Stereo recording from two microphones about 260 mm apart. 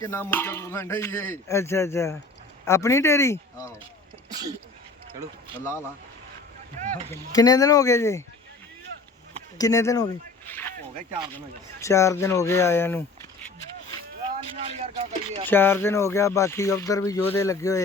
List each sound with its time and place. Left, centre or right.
0.0 s speech: centre
4.3 s speech: centre
6.9 s speech: centre
9.6 s speech: centre
10.9 s speech: centre
11.3 s speech: centre
14.6 s speech: right
15.4 s speech: centre